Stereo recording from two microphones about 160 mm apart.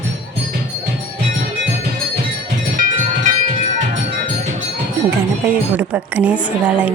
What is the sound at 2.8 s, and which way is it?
Cowbell, 55° right (ahead or behind).